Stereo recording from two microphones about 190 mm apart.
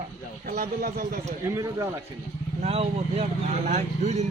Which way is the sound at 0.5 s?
45° right (ahead or behind).